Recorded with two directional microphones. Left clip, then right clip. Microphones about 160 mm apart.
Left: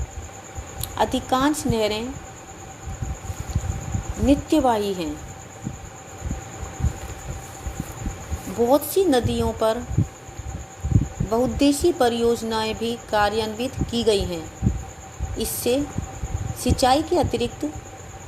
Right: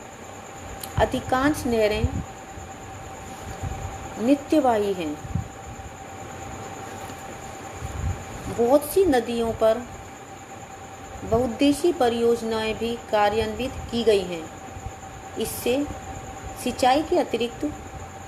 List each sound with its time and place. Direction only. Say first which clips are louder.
0.9 s speech: left 1 dB; 35° left (ahead or behind)
4.3 s speech: left 1 dB; 40° left (ahead or behind)
4.8 s a woman's voice: right 1 dB; 5° left (ahead or behind)
8.7 s speech: even; 35° left (ahead or behind)
11.3 s speech: left 1 dB; 35° left (ahead or behind)
15.4 s speech: left 2 dB; 40° left (ahead or behind)